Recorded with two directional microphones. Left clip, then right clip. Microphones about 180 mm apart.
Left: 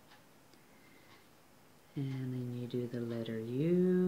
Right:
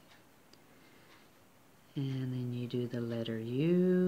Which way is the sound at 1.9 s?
35° right (ahead or behind).